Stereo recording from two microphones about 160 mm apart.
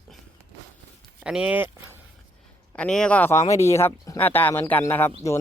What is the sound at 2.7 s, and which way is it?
A man's voice, 5° left (ahead or behind).